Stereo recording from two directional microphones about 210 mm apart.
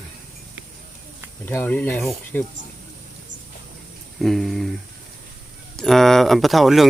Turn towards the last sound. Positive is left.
turn(degrees=0)  # may be behind; listen again after turning